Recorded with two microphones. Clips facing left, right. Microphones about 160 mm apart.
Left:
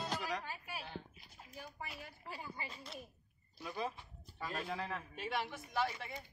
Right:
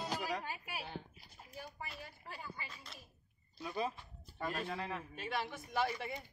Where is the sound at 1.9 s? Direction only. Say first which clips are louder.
Left 1 dB; 10° left (ahead or behind).